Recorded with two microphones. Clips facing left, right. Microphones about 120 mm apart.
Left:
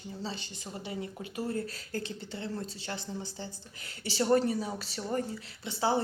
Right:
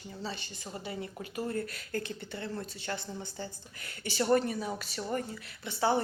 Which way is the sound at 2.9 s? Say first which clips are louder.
Right 3 dB; 25° left (ahead or behind).